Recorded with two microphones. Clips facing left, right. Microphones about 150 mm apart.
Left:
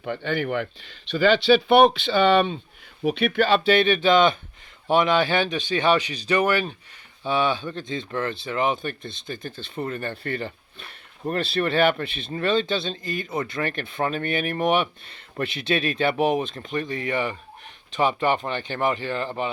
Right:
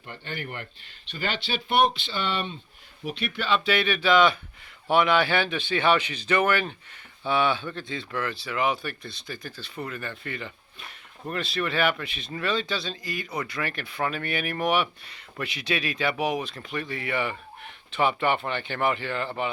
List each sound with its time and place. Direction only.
0.0 s speech: 70° left (ahead or behind); by 3.6 s 50° left (ahead or behind)
3.6 s speech: 30° left (ahead or behind)